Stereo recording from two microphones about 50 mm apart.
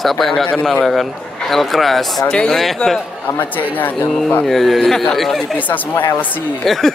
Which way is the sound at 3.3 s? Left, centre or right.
Left.